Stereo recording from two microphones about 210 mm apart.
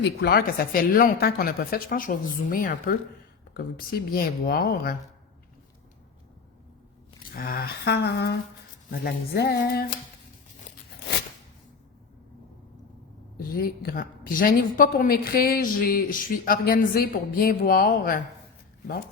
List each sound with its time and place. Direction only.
0.0 s a woman's voice: 50° left (ahead or behind)
7.3 s a woman's voice: 45° left (ahead or behind)
13.3 s a woman's voice: 45° left (ahead or behind)